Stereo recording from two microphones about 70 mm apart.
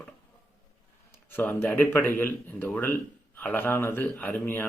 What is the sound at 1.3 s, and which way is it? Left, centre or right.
A man's voice, left.